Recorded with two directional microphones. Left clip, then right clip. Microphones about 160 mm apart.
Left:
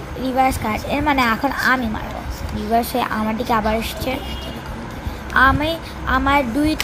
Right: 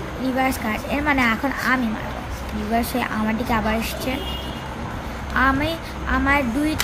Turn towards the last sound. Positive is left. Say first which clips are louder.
# left 3 dB
turn(degrees=10)  # may be behind; listen again after turning